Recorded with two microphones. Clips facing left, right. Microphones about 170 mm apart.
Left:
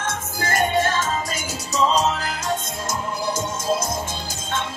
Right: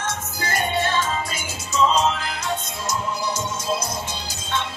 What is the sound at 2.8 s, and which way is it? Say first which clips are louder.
Music: right 1 dB; 50° left (ahead or behind).